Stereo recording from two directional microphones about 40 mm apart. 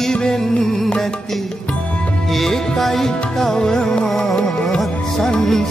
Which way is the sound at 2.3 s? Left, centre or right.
Centre.